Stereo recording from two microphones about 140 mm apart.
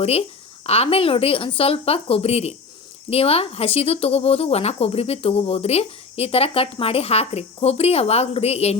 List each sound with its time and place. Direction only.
0.0 s speech: 45° left (ahead or behind)